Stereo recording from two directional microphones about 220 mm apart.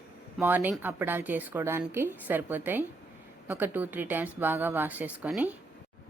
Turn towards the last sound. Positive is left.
turn(degrees=-5)  # may be behind; listen again after turning